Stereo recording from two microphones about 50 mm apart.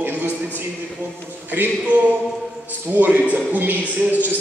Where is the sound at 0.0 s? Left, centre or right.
Right.